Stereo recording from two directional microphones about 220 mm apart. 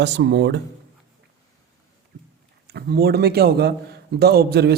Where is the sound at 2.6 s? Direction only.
45° right (ahead or behind).